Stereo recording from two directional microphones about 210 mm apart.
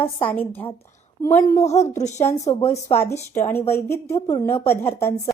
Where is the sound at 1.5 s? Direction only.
30° left (ahead or behind).